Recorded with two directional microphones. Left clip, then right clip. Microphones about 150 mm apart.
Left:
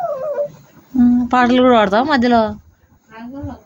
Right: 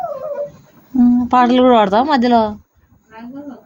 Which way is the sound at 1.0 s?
10° right (ahead or behind).